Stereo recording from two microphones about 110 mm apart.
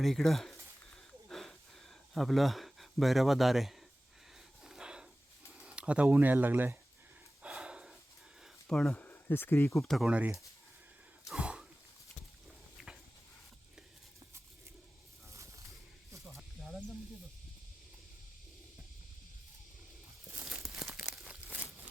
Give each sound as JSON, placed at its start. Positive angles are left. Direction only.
{"t": 0.0, "sound": "speech", "side_deg": 0}
{"t": 1.3, "sound": "a sound", "side_deg": 5}
{"t": 2.1, "sound": "speech", "side_deg": 0}
{"t": 4.6, "sound": "snort", "side_deg": -5}
{"t": 5.5, "sound": "speech", "side_deg": -10}
{"t": 7.4, "sound": "snort", "side_deg": -10}
{"t": 8.6, "sound": "speech", "side_deg": 5}
{"t": 9.0, "sound": "speech", "side_deg": 20}
{"t": 9.8, "sound": "speech", "side_deg": 0}
{"t": 10.1, "sound": "speech", "side_deg": -10}
{"t": 11.3, "sound": "throat clearing", "side_deg": -10}
{"t": 15.3, "sound": "snake", "side_deg": -30}
{"t": 20.5, "sound": "crumpling", "side_deg": -5}